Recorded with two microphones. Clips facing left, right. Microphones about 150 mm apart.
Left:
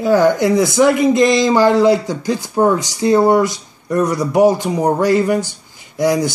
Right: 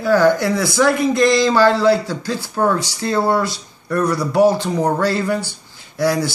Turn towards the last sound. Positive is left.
turn(degrees=15)  # may be behind; listen again after turning